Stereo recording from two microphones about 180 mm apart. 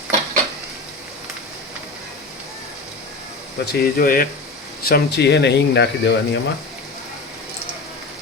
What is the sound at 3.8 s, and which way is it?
Cutlery, 55° left (ahead or behind).